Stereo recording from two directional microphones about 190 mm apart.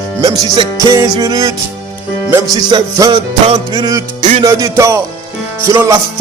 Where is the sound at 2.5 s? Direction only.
20° right (ahead or behind).